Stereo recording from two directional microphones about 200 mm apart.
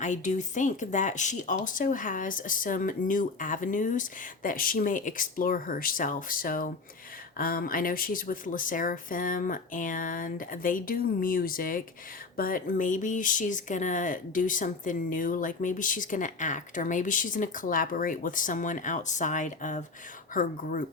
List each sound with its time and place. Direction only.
0.0 s speech: 35° left (ahead or behind)